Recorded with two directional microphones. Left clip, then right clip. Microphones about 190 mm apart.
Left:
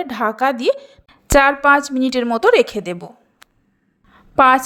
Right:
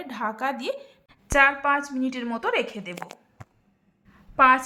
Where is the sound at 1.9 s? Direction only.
40° left (ahead or behind).